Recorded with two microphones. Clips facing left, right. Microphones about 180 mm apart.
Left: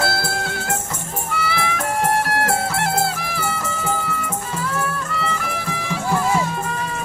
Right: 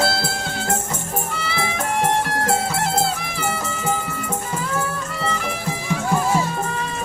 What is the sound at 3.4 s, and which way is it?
Music, 20° right (ahead or behind).